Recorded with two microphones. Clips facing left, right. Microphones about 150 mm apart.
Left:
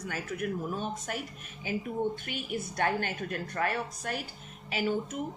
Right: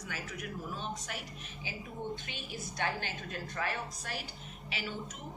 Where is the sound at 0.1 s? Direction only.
50° left (ahead or behind).